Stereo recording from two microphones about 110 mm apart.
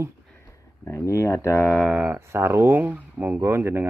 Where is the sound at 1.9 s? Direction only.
15° right (ahead or behind).